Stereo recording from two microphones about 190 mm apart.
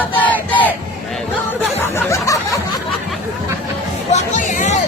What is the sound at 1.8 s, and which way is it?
Snicker, 15° left (ahead or behind).